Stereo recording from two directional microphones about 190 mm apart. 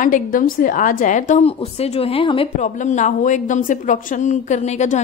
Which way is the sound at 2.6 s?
40° left (ahead or behind).